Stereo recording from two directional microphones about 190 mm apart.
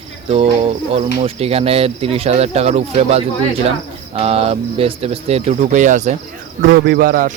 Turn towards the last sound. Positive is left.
turn(degrees=-50)  # may be behind; listen again after turning